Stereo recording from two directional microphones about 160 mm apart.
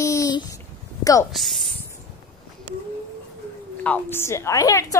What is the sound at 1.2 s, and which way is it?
Female singing, centre (ahead or behind).